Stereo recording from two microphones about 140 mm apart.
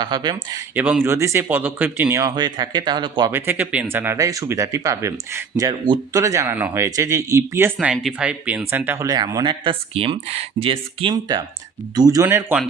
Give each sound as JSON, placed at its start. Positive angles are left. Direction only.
{"t": 0.0, "sound": "speech", "side_deg": -30}
{"t": 0.7, "sound": "speech", "side_deg": -10}
{"t": 3.3, "sound": "speech", "side_deg": -15}
{"t": 7.9, "sound": "speech", "side_deg": -5}
{"t": 9.0, "sound": "speech", "side_deg": -25}